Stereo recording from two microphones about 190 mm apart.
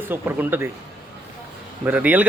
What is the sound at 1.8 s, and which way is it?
Speech, 10° right (ahead or behind).